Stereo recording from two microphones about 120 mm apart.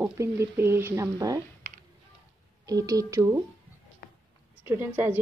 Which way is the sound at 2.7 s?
30° right (ahead or behind).